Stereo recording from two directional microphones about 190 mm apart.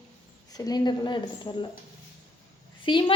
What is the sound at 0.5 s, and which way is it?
Speech, 20° left (ahead or behind).